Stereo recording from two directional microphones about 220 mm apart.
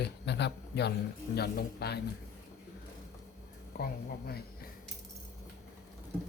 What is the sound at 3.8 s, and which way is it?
Speech, 45° left (ahead or behind).